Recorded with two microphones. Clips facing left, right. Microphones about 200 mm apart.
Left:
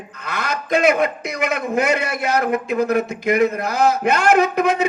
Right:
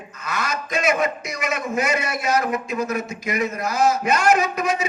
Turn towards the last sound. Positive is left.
turn(degrees=60)  # may be behind; listen again after turning